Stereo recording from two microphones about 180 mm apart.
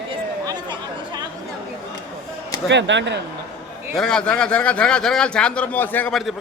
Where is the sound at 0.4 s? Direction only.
25° right (ahead or behind).